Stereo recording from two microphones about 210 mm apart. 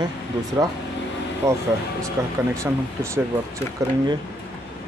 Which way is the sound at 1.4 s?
15° right (ahead or behind).